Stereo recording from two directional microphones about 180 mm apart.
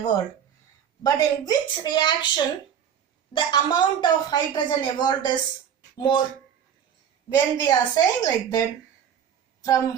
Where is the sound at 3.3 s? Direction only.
25° left (ahead or behind).